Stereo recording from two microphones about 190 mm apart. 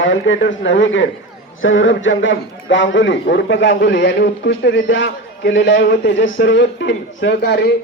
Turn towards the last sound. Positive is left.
turn(degrees=60)  # may be behind; listen again after turning